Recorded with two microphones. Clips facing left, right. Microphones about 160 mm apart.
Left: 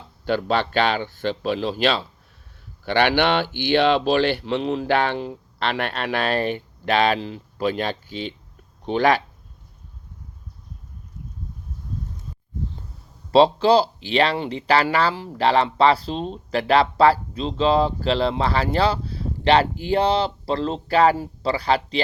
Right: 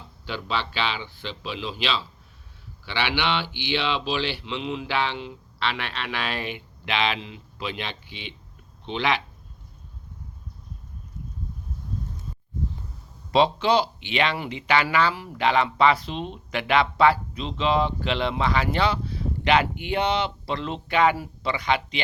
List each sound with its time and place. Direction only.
0.3 s speech: 50° left (ahead or behind)
13.3 s speech: 35° left (ahead or behind)